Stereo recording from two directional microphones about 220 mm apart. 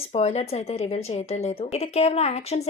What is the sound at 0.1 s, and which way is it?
A woman's voice, 30° left (ahead or behind).